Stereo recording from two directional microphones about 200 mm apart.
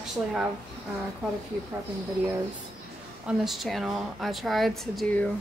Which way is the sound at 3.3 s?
Centre (ahead or behind).